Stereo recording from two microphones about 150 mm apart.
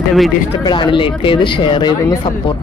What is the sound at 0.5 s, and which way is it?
Speech, 30° left (ahead or behind).